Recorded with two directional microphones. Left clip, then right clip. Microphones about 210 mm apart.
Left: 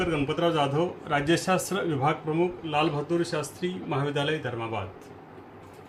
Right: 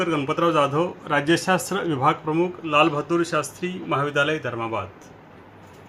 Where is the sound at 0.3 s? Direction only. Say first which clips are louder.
Right 6 dB; centre (ahead or behind).